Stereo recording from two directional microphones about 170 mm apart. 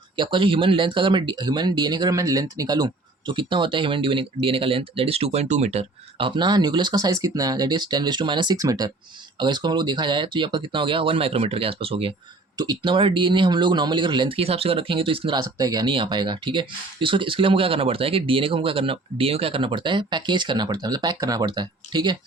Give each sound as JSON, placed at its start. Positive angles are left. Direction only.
{"t": 0.2, "sound": "speech", "side_deg": -30}